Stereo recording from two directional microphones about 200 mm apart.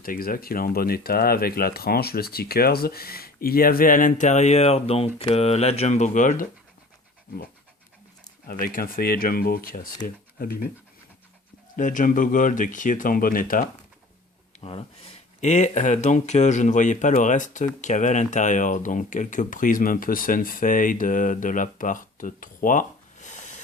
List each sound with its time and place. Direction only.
0.0 s speech: 45° left (ahead or behind)
8.4 s speech: 45° left (ahead or behind)
11.8 s speech: 40° left (ahead or behind)
14.6 s speech: 30° left (ahead or behind)